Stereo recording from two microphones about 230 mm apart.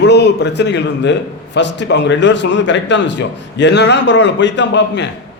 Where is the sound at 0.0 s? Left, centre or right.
Left.